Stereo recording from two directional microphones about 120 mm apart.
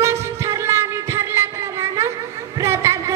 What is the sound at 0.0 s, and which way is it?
Music, 25° right (ahead or behind).